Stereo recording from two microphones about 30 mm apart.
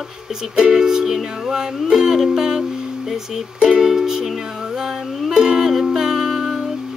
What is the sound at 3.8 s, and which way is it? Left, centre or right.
Music, centre.